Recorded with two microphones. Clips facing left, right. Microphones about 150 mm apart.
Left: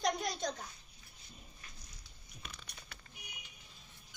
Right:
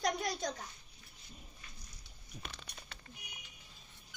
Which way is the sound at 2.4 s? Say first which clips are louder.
Right 1 dB; 30° right (ahead or behind).